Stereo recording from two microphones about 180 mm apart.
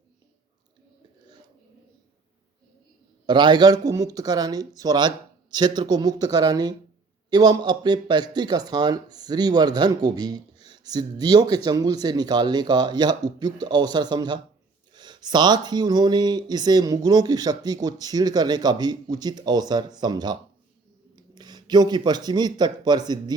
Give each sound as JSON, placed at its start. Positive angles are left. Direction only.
{"t": 3.2, "sound": "a man's voice", "side_deg": -25}